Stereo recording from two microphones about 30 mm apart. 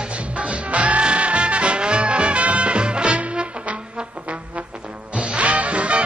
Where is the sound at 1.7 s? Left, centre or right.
Right.